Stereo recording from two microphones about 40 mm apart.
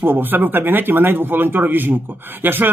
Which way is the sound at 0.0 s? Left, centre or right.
Right.